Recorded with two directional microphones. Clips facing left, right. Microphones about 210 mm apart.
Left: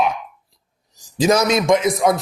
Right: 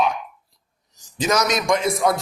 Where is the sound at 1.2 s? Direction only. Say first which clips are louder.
Left 5 dB; 30° left (ahead or behind).